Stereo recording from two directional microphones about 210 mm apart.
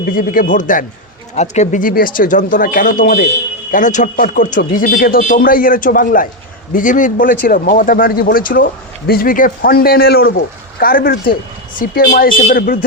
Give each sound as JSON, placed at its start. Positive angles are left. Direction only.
{"t": 0.0, "sound": "speech", "side_deg": 40}